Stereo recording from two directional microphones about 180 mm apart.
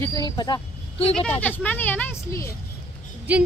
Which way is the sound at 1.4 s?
10° left (ahead or behind).